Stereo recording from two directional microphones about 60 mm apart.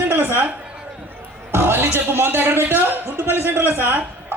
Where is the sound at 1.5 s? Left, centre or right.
Right.